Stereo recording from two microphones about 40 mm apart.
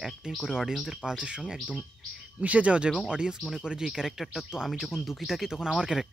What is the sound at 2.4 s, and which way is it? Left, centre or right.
Speech, right.